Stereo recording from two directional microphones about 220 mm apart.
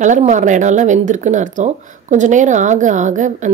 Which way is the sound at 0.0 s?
35° right (ahead or behind).